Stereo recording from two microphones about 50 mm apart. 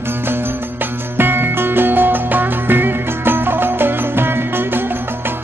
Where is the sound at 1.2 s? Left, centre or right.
Right.